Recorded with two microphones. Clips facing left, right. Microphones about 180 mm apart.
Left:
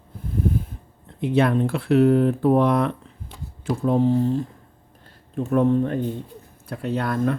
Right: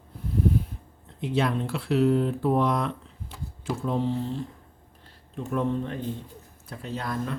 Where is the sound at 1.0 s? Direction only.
55° left (ahead or behind).